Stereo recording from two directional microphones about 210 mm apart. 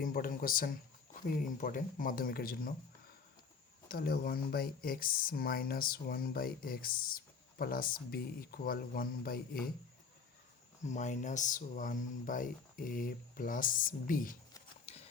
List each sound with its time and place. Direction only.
0.0 s speech: 40° left (ahead or behind)
3.8 s speech: 45° left (ahead or behind)
10.8 s speech: 35° left (ahead or behind)